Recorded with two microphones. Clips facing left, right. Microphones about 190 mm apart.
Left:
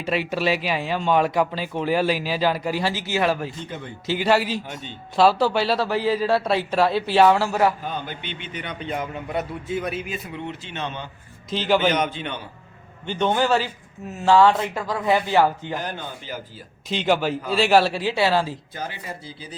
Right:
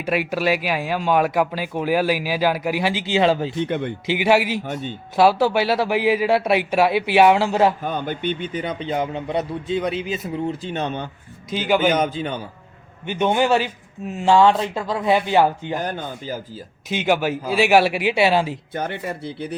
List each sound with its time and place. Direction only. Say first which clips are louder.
0.0 s speech: right 2 dB; 10° right (ahead or behind); by 3.5 s 25° right (ahead or behind)
3.5 s speech: right 11 dB; 65° right (ahead or behind)
4.0 s speech: right 1 dB; 15° right (ahead or behind)
4.6 s speech: right 8 dB; 50° right (ahead or behind)
5.1 s speech: right 2 dB; 10° right (ahead or behind)
7.8 s speech: right 6 dB; 50° right (ahead or behind)
8.6 s speech: right 4 dB; 30° right (ahead or behind)
10.3 s speech: right 7 dB; 40° right (ahead or behind)
11.5 s speech: right 1 dB; 10° right (ahead or behind)
11.9 s speech: right 3 dB; 35° right (ahead or behind)
13.1 s speech: right 2 dB; 15° right (ahead or behind)
15.8 s speech: right 4 dB; 40° right (ahead or behind)
16.9 s speech: right 1 dB; 10° right (ahead or behind)
18.7 s speech: right 6 dB; 60° right (ahead or behind)